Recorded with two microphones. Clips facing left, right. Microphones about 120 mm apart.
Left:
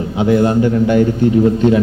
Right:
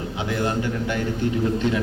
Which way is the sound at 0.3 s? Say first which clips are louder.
Left 12 dB; 25° left (ahead or behind).